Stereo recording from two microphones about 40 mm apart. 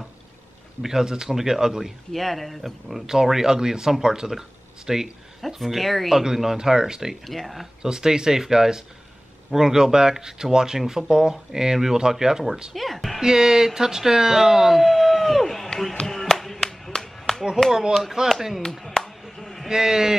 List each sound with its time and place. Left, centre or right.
0.8 s speech: centre
2.1 s speech: centre
3.1 s speech: centre
5.6 s speech: centre
6.1 s speech: centre
7.2 s speech: centre
7.8 s speech: centre
12.7 s speech: centre
13.2 s speech: centre
16.1 s a sound: centre
17.6 s speech: centre
18.8 s chop: centre
19.7 s speech: centre